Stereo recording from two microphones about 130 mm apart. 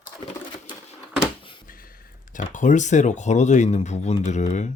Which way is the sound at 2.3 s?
75° left (ahead or behind).